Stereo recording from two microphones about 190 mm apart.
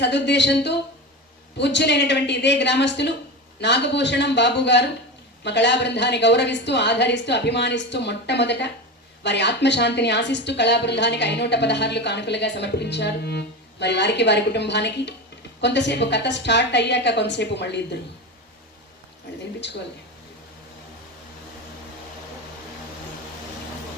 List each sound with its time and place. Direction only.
0.0 s a woman's voice: 65° left (ahead or behind)